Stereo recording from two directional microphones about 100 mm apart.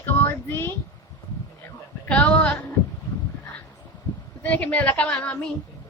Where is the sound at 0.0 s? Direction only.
20° left (ahead or behind).